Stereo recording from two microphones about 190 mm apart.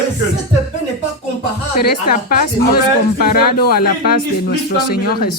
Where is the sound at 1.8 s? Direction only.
50° left (ahead or behind).